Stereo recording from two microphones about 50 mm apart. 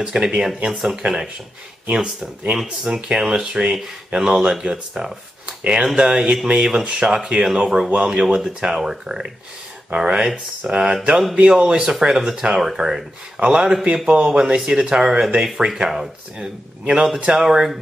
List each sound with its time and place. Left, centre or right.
0.0 s speech: centre
2.5 s speech: centre